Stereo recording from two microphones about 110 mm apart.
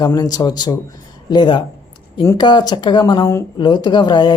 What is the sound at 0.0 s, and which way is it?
Speech, 35° left (ahead or behind).